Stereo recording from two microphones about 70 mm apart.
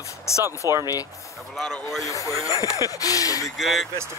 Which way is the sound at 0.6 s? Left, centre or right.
Right.